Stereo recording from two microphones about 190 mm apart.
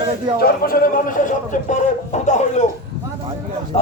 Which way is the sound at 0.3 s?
50° left (ahead or behind).